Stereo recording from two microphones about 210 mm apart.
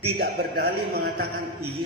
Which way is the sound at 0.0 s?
45° right (ahead or behind).